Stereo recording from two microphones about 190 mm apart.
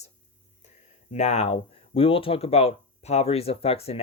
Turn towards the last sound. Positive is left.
turn(degrees=30)  # may be behind; listen again after turning